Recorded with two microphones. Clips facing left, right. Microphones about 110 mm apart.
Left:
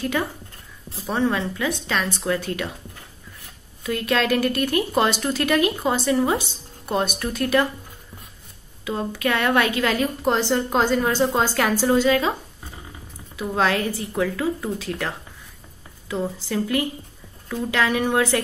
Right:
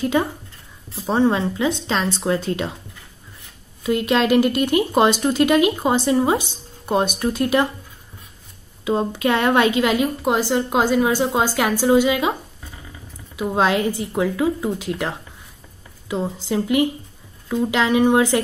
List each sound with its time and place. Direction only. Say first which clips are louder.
0.0 s a woman's voice: right 5 dB; 25° right (ahead or behind)
3.8 s a woman's voice: right 4 dB; 20° right (ahead or behind)
8.8 s a woman's voice: right 5 dB; 25° right (ahead or behind)
13.4 s a woman's voice: right 3 dB; 20° right (ahead or behind)